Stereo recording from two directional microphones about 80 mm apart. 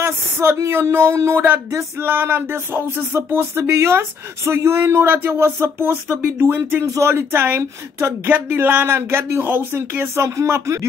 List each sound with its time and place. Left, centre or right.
0.0 s speech: right